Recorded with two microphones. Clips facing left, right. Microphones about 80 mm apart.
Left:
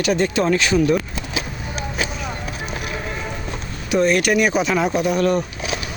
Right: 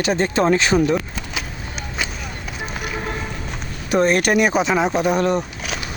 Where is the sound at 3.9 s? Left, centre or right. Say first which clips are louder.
Even; right.